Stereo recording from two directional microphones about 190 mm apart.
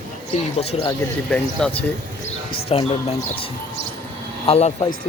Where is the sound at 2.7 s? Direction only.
35° left (ahead or behind).